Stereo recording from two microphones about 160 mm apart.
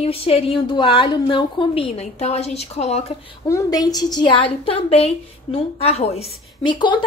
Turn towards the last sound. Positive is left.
turn(degrees=30)  # may be behind; listen again after turning